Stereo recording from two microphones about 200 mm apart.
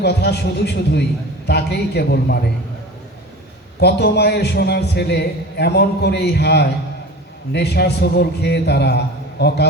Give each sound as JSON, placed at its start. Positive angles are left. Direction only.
{"t": 0.0, "sound": "a man's voice", "side_deg": 55}
{"t": 3.8, "sound": "a man's voice", "side_deg": 55}